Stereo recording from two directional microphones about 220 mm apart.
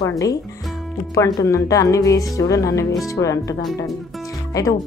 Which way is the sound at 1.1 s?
15° left (ahead or behind).